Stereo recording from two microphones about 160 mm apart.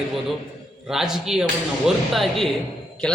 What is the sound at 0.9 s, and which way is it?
A man's voice, 5° right (ahead or behind).